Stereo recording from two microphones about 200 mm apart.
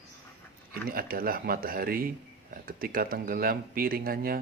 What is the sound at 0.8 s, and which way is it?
Speech, 45° right (ahead or behind).